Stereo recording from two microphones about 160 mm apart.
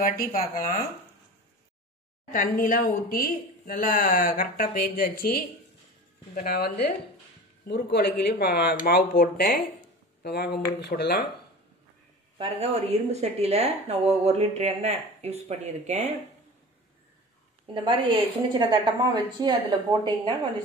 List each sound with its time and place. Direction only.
0.0 s speech: 60° left (ahead or behind)
2.3 s speech: 60° left (ahead or behind)
7.6 s speech: 85° left
9.1 s speech: 60° left (ahead or behind)
10.2 s speech: 85° left
12.4 s a woman's voice: 40° right (ahead or behind)
17.7 s speech: 30° right (ahead or behind)